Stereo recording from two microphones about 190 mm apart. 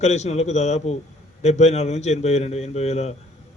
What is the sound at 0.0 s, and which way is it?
A man's voice, 35° left (ahead or behind).